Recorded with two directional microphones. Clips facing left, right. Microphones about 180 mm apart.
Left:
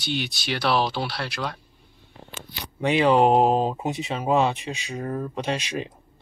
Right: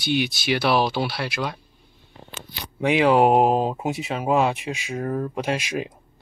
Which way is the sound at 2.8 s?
10° right (ahead or behind).